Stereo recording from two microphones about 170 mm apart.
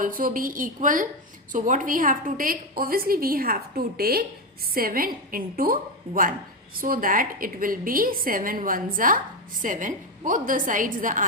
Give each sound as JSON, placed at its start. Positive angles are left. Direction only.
{"t": 0.0, "sound": "a woman's voice", "side_deg": -55}